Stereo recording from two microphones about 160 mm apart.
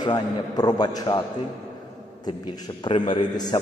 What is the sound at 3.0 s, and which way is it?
Speech, 25° left (ahead or behind).